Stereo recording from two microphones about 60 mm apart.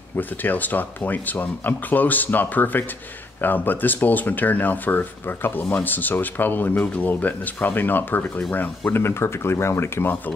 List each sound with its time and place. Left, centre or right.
0.4 s speech: left
8.9 s speech: left